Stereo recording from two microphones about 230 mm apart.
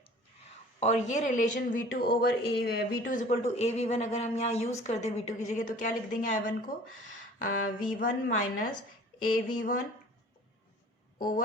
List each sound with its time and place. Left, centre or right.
0.8 s speech: left